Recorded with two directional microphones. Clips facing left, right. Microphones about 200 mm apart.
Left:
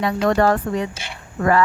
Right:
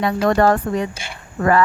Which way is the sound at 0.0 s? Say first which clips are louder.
Right 2 dB; 45° right (ahead or behind).